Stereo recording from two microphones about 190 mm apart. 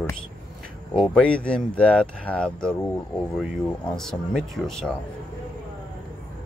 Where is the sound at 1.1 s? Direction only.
5° left (ahead or behind).